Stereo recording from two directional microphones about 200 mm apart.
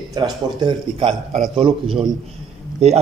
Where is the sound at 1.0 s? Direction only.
30° right (ahead or behind).